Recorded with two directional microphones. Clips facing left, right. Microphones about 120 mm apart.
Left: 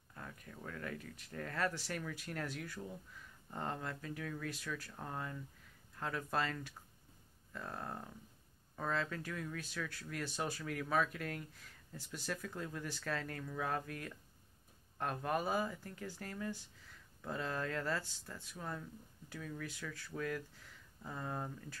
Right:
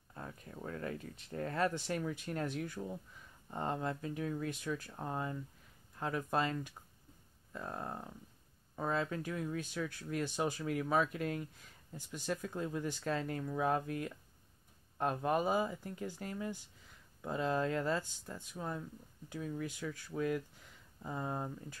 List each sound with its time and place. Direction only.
0.1 s speech: 30° right (ahead or behind)